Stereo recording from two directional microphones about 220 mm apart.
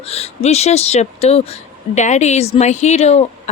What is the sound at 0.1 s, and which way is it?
Speech, 30° left (ahead or behind).